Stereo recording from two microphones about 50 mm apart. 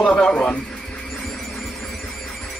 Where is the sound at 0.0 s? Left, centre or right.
Left.